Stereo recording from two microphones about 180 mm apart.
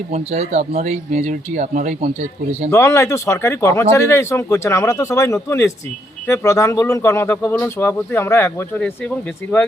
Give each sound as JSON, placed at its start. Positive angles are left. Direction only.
{"t": 0.1, "sound": "speech", "side_deg": -35}
{"t": 2.6, "sound": "speech", "side_deg": 15}